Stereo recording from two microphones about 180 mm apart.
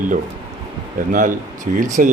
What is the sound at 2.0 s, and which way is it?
Speech, 45° right (ahead or behind).